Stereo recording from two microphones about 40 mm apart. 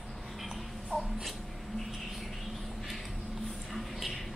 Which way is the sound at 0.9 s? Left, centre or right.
Centre.